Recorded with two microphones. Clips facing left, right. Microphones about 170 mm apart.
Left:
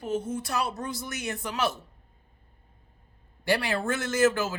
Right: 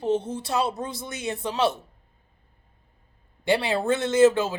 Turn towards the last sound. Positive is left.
turn(degrees=-30)  # may be behind; listen again after turning